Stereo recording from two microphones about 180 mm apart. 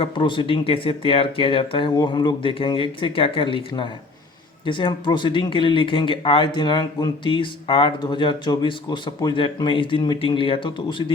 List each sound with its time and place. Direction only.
0.0 s speech: 25° left (ahead or behind)